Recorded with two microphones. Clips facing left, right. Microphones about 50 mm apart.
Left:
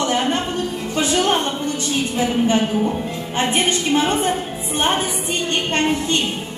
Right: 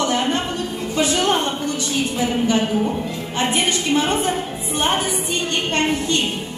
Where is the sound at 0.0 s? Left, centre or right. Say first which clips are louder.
Even; left.